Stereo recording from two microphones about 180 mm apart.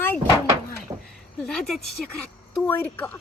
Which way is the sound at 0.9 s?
20° right (ahead or behind).